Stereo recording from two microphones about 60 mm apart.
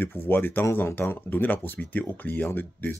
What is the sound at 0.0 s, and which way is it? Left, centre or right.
Speech, left.